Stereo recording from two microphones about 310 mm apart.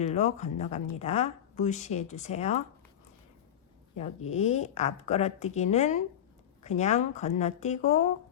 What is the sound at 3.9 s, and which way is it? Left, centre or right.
Speech, left.